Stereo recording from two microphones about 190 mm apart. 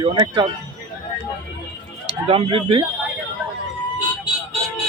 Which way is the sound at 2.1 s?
30° right (ahead or behind).